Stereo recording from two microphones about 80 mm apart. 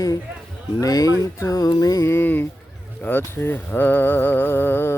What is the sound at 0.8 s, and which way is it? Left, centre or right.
Speech, left.